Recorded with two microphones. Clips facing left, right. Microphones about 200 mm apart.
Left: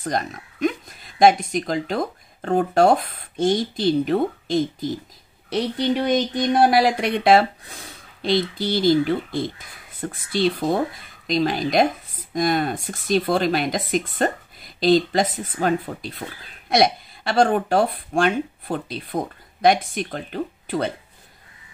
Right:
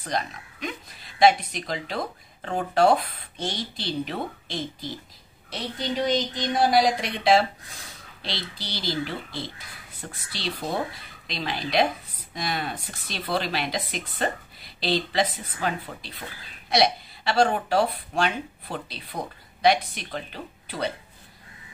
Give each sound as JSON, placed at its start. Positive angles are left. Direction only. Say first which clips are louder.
{"t": 0.0, "sound": "speech", "louder": "left 4 dB", "side_deg": 45}
{"t": 6.1, "sound": "speech", "louder": "left 6 dB", "side_deg": 60}